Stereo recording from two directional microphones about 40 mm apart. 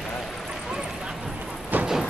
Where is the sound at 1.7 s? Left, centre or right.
Right.